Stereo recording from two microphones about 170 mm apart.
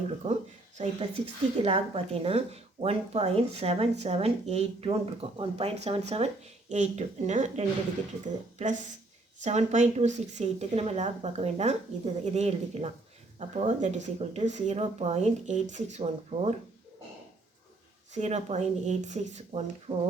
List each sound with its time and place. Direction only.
0.2 s speech: 35° right (ahead or behind)
9.4 s speech: 40° right (ahead or behind)
18.1 s speech: 45° right (ahead or behind)